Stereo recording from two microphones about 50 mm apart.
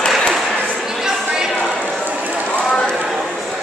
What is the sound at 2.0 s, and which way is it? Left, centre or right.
Run, right.